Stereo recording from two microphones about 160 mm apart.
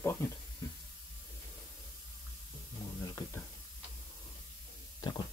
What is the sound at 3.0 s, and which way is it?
Speech, 20° left (ahead or behind).